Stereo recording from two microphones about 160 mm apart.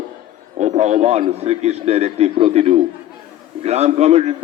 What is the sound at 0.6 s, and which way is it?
A man's voice, 45° right (ahead or behind).